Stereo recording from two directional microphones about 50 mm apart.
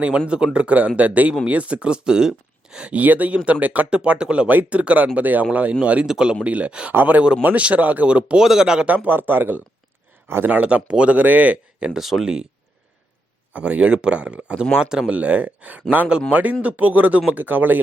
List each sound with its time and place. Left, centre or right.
0.3 s speech: right
2.9 s speech: right
8.4 s speech: centre
8.9 s speech: right
11.9 s speech: centre
13.5 s speech: right
15.1 s speech: right